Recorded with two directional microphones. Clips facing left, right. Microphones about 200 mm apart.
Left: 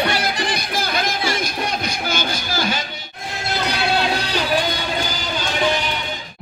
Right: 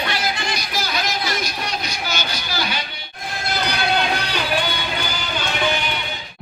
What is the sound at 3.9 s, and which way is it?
Music, 35° left (ahead or behind).